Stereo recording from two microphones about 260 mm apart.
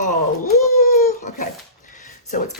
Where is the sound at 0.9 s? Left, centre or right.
Left.